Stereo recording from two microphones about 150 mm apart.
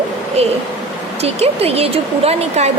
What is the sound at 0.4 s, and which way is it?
Speech, 45° right (ahead or behind).